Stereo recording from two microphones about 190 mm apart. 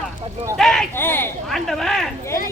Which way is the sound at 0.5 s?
Centre (ahead or behind).